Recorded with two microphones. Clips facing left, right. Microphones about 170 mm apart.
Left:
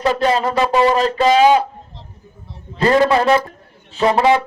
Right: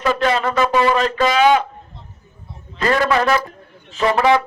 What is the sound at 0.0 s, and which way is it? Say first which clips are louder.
A man's voice: left 2 dB; 35° left (ahead or behind).